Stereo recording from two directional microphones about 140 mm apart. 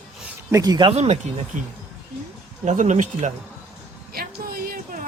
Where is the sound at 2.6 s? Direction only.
60° right (ahead or behind).